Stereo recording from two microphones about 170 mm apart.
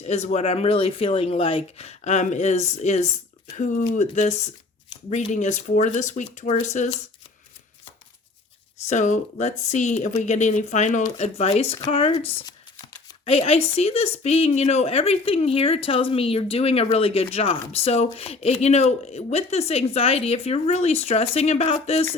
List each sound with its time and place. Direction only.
0.0 s a woman's voice: 40° left (ahead or behind)
8.9 s a woman's voice: 45° left (ahead or behind)
12.2 s speech: 10° left (ahead or behind)
13.2 s a woman's voice: 35° left (ahead or behind)